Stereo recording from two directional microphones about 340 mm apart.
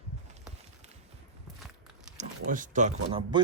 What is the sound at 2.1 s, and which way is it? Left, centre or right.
Speech, right.